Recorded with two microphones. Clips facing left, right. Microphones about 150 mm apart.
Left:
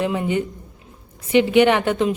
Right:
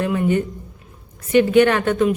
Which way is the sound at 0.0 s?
20° left (ahead or behind).